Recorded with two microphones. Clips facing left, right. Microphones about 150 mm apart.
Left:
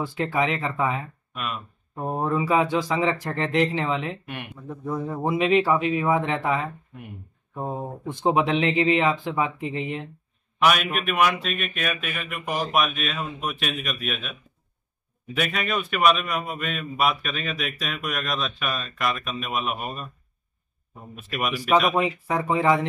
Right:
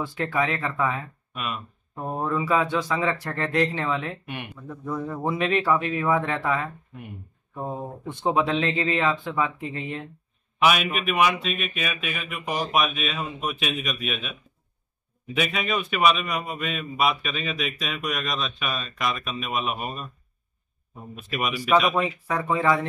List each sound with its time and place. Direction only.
0.0 s speech: 10° left (ahead or behind)
1.3 s speech: centre (ahead or behind)
2.1 s speech: 15° left (ahead or behind)
8.1 s speech: 15° left (ahead or behind)
10.6 s a man's voice: centre (ahead or behind)
15.3 s a man's voice: centre (ahead or behind)
21.1 s a man's voice: centre (ahead or behind)
22.3 s speech: 20° left (ahead or behind)